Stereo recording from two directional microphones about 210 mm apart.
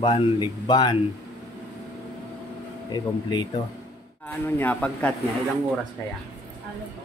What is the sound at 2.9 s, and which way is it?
Speech, 20° left (ahead or behind).